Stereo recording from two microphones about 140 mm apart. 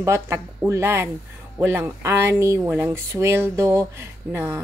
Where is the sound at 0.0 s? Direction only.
20° right (ahead or behind).